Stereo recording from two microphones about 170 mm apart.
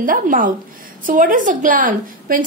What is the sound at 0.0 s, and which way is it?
A woman's voice, 55° right (ahead or behind).